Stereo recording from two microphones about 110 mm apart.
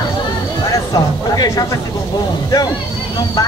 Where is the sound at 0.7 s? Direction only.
35° left (ahead or behind).